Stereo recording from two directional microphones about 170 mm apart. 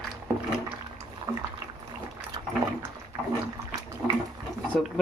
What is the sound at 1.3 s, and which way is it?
Boiling, 20° right (ahead or behind).